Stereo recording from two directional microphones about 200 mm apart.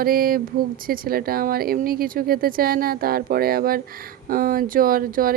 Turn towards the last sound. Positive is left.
turn(degrees=-45)  # may be behind; listen again after turning